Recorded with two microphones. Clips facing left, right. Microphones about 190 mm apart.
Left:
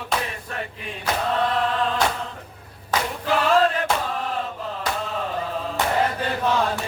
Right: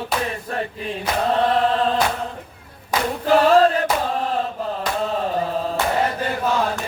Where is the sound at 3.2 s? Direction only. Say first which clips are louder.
Right 5 dB; 40° right (ahead or behind).